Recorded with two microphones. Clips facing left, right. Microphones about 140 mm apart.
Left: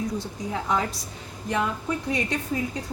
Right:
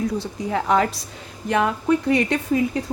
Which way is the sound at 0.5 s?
70° right (ahead or behind).